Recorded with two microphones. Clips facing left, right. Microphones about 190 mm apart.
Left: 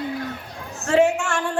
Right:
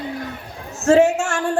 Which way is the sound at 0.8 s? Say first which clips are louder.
Right 4 dB; 45° right (ahead or behind).